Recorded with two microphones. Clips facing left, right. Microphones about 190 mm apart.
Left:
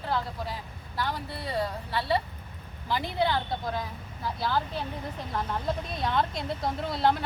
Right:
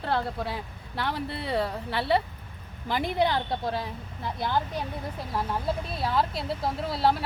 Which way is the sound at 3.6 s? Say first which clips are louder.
Right 2 dB; 30° right (ahead or behind).